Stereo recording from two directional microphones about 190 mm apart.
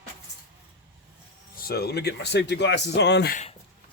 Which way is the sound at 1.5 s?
55° left (ahead or behind).